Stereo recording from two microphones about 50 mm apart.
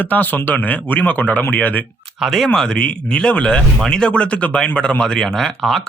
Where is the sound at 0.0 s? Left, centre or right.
Left.